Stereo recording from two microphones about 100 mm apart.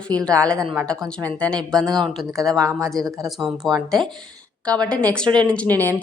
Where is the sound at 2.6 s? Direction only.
35° right (ahead or behind).